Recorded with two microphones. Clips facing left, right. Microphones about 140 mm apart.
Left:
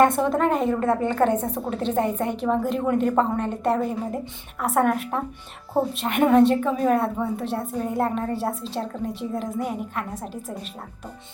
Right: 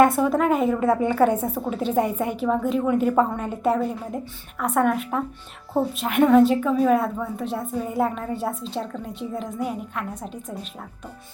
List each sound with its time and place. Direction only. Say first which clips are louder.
0.0 s a woman's voice: right 1 dB; 5° right (ahead or behind)